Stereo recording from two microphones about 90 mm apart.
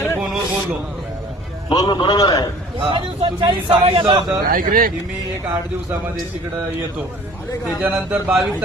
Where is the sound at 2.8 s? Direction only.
65° right (ahead or behind); by 4.1 s 90° right.